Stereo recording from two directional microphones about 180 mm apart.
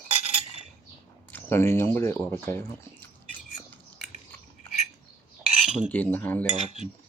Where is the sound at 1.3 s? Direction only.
10° left (ahead or behind).